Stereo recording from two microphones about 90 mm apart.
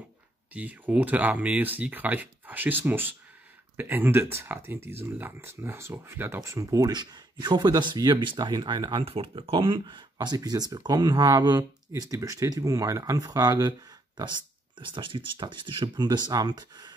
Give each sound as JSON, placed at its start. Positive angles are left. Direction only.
{"t": 0.5, "sound": "speech", "side_deg": -15}
{"t": 6.4, "sound": "speech", "side_deg": -35}
{"t": 6.9, "sound": "speech", "side_deg": -50}
{"t": 9.0, "sound": "speech", "side_deg": -80}
{"t": 10.2, "sound": "speech", "side_deg": -45}